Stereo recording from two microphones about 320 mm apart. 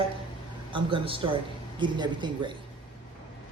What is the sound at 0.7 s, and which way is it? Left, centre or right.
Speech, centre.